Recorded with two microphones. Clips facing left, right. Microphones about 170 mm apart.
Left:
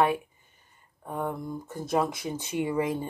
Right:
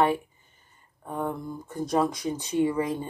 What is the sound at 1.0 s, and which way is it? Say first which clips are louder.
Speech: right 1 dB; 10° left (ahead or behind).